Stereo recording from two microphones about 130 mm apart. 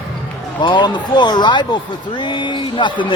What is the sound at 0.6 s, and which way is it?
Speech, 35° left (ahead or behind).